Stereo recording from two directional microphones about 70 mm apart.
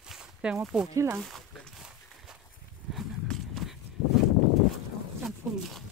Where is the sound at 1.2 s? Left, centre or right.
Centre.